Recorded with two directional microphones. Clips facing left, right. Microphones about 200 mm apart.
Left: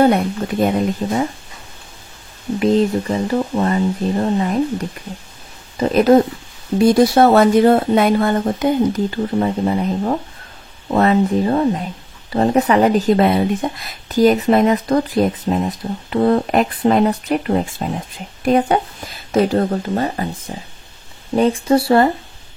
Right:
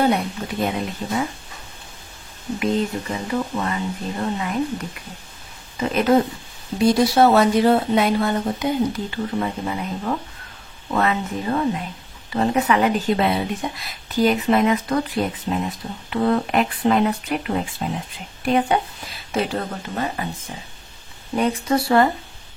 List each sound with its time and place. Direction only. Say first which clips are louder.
0.0 s speech: left 6 dB; 50° left (ahead or behind)
2.6 s speech: left 7 dB; 35° left (ahead or behind)
6.9 s speech: left 4 dB; 50° left (ahead or behind)
21.4 s speech: left 6 dB; 30° left (ahead or behind)